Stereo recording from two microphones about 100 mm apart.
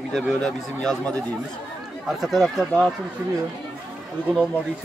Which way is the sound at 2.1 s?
5° right (ahead or behind).